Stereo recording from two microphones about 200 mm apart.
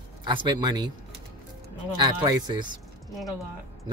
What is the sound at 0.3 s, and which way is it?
Speech, 20° right (ahead or behind).